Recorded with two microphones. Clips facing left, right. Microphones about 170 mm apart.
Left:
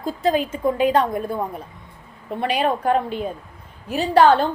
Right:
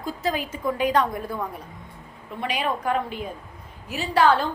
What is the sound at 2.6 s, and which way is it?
A woman's voice, 35° left (ahead or behind).